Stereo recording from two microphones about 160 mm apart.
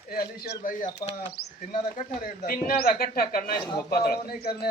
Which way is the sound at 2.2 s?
65° left (ahead or behind).